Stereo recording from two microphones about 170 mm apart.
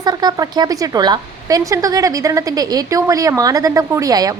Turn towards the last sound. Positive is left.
turn(degrees=-20)  # may be behind; listen again after turning